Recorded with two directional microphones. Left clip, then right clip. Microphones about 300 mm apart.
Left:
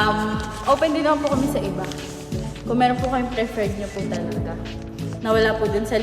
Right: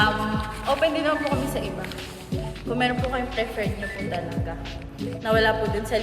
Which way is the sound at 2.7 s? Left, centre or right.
Left.